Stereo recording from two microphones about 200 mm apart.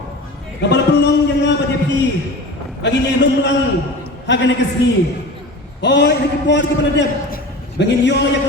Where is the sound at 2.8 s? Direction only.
60° left (ahead or behind).